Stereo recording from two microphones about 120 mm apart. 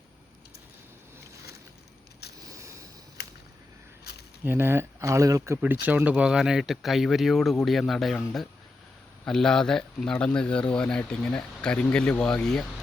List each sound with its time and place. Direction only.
2.5 s a sound: 25° right (ahead or behind)
4.4 s speech: 20° right (ahead or behind)
5.5 s speech: 15° right (ahead or behind); by 12.6 s 5° left (ahead or behind)